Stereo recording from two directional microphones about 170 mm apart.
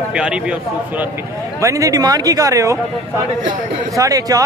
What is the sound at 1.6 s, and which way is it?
Speech, 20° right (ahead or behind).